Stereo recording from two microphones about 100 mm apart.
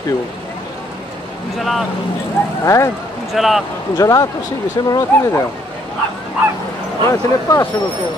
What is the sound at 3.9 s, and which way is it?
Speech, 35° left (ahead or behind).